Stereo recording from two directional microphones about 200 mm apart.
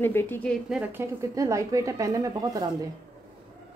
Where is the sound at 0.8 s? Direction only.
10° right (ahead or behind).